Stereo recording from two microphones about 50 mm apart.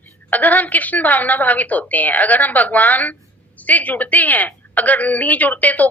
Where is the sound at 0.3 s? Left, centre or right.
Left.